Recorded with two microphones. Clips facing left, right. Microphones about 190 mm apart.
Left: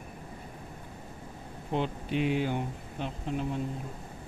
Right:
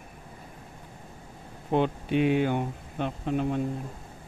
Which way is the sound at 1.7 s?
55° right (ahead or behind).